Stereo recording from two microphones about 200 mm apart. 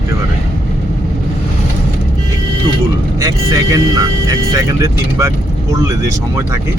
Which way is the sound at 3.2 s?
15° right (ahead or behind).